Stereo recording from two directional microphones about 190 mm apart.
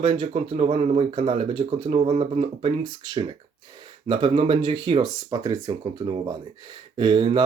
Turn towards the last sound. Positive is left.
turn(degrees=-25)  # may be behind; listen again after turning